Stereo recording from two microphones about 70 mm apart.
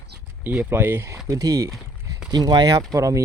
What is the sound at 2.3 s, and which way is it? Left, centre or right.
Speech, right.